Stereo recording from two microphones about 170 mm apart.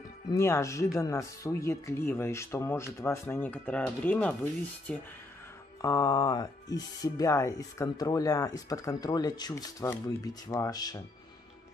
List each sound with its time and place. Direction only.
0.3 s speech: 15° left (ahead or behind)
5.8 s speech: 20° left (ahead or behind)